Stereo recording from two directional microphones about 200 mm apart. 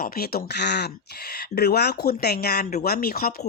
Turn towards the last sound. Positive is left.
turn(degrees=50)  # may be behind; listen again after turning